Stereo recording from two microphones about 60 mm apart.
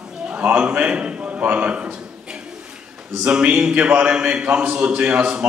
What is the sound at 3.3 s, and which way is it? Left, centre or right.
A man's voice, centre.